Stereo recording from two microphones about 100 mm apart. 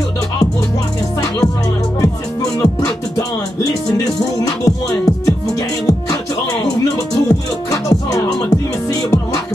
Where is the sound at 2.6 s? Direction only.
35° left (ahead or behind).